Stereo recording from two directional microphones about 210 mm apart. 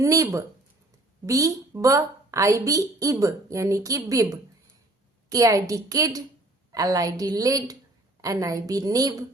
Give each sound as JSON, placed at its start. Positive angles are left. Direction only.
{"t": 0.0, "sound": "a woman's voice", "side_deg": -15}